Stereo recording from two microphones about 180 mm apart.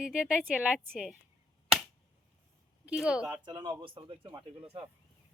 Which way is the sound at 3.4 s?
25° right (ahead or behind).